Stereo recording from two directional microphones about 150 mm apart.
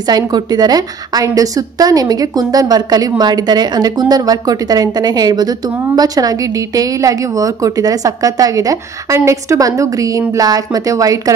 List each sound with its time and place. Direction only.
0.0 s a woman's voice: 25° right (ahead or behind)